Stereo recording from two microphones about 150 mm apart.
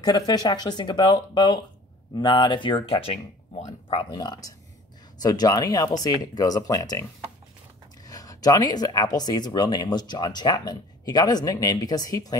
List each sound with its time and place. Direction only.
0.0 s speech: 25° left (ahead or behind); by 4.0 s 45° left (ahead or behind)
4.1 s speech: 25° left (ahead or behind)